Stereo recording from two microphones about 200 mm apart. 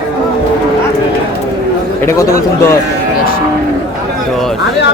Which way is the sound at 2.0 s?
15° left (ahead or behind).